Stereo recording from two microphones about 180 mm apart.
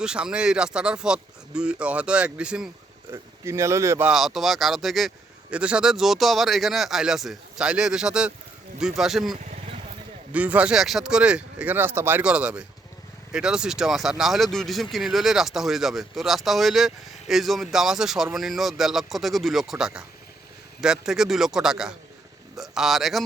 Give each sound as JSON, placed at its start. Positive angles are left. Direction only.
{"t": 0.0, "sound": "speech", "side_deg": -5}
{"t": 4.1, "sound": "speech", "side_deg": 0}
{"t": 10.3, "sound": "speech", "side_deg": -10}